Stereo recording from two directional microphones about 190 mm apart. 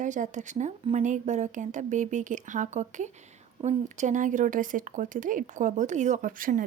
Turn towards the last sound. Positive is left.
turn(degrees=-45)  # may be behind; listen again after turning